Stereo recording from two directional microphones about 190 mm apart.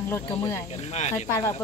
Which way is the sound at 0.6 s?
35° left (ahead or behind).